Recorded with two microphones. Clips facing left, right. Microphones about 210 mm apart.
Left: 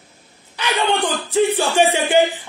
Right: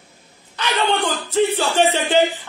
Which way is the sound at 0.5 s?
15° left (ahead or behind).